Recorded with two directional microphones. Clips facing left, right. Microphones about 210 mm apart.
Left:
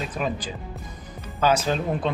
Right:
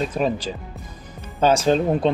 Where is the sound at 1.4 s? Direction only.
30° right (ahead or behind).